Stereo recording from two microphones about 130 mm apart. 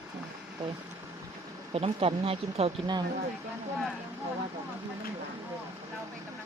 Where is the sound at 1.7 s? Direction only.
45° right (ahead or behind).